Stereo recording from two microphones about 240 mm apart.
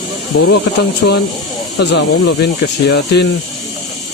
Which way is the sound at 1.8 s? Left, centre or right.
Left.